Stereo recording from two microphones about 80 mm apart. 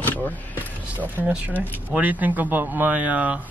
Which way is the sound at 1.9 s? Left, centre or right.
Right.